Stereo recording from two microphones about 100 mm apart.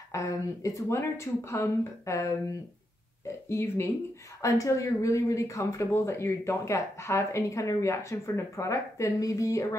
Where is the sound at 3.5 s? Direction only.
25° left (ahead or behind).